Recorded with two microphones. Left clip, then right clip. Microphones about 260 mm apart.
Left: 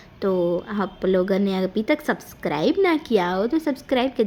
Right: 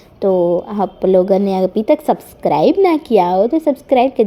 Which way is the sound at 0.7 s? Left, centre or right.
Centre.